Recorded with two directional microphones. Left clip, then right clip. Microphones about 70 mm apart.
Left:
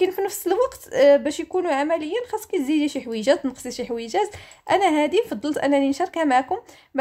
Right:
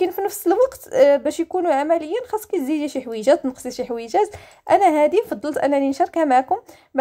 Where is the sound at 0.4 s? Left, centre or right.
Right.